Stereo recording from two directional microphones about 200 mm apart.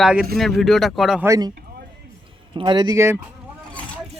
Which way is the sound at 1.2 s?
15° right (ahead or behind).